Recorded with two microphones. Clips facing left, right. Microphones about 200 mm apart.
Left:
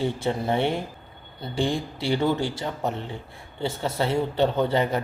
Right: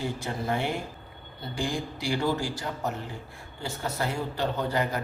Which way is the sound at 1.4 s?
25° left (ahead or behind).